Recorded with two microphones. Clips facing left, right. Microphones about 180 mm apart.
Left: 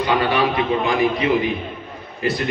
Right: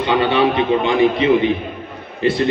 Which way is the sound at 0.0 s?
25° right (ahead or behind).